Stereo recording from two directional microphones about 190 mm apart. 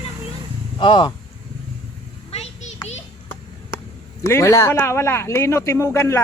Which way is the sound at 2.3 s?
30° left (ahead or behind).